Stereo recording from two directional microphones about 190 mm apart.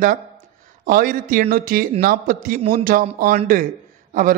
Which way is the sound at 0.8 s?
45° right (ahead or behind).